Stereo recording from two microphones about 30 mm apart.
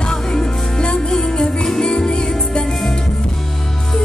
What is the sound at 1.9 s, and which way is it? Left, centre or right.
Music, left.